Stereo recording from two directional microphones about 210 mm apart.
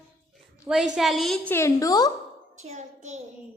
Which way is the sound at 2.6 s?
35° right (ahead or behind).